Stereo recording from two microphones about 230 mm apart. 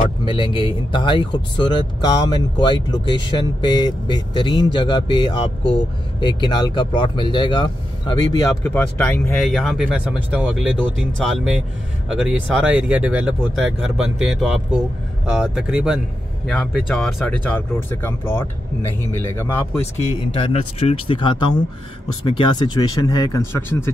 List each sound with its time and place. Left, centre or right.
0.2 s speech: left
20.3 s speech: left